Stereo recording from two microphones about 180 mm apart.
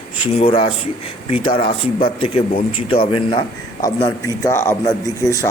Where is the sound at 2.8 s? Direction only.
30° left (ahead or behind).